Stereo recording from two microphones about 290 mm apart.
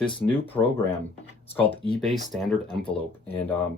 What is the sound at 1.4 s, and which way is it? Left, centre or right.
Speech, centre.